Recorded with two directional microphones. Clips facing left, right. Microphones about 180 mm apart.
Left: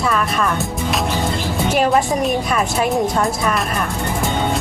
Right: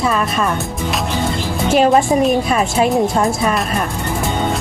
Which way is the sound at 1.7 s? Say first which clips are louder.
Right 4 dB; 25° right (ahead or behind).